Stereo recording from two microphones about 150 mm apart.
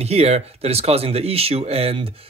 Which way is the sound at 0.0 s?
45° right (ahead or behind).